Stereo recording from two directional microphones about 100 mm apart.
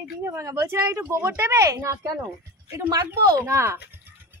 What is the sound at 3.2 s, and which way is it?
Speech, 30° right (ahead or behind).